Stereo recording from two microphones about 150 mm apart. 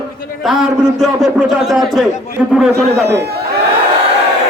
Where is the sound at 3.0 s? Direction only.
90° right.